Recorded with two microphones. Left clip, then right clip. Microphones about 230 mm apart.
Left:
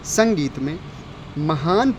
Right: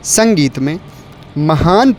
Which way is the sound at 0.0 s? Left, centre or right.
Right.